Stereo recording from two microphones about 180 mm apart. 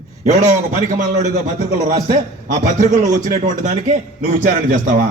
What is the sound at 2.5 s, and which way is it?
A man's voice, 45° right (ahead or behind).